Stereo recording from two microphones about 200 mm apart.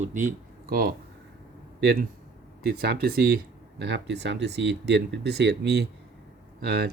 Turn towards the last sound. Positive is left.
turn(degrees=-50)  # may be behind; listen again after turning